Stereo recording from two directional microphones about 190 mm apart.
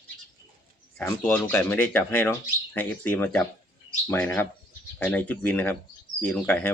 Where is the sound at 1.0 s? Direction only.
10° left (ahead or behind).